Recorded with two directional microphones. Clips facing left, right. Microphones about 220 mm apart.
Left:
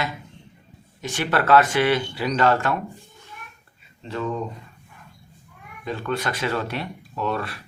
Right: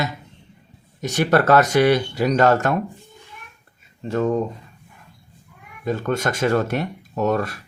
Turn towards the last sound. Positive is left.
turn(degrees=-45)  # may be behind; listen again after turning